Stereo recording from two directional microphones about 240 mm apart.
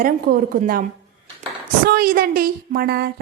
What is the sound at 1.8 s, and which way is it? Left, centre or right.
A woman's voice, right.